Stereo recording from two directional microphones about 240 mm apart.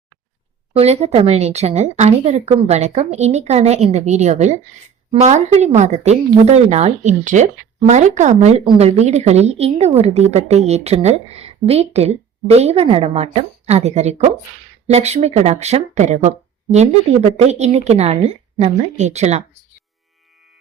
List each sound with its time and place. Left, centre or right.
0.7 s a woman's voice: right